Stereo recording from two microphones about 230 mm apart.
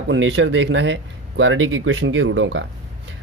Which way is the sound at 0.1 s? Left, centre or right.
Right.